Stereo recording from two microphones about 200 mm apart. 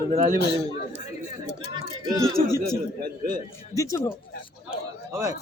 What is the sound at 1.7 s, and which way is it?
Speech, 20° right (ahead or behind).